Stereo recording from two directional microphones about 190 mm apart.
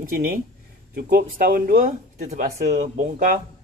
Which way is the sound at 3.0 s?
45° right (ahead or behind).